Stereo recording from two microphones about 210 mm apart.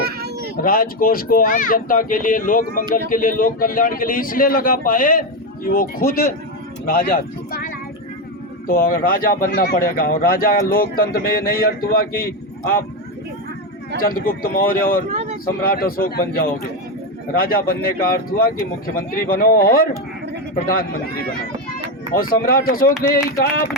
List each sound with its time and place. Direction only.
0.0 s vehicle: 50° right (ahead or behind)
0.5 s speech: 45° left (ahead or behind)
14.0 s speech: 45° left (ahead or behind)
15.1 s a sound: 30° right (ahead or behind)
15.6 s speech: 45° left (ahead or behind)
22.1 s speech: 45° left (ahead or behind)